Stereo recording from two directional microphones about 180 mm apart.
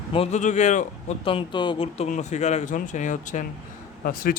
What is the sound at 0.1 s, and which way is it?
Speech, 35° left (ahead or behind).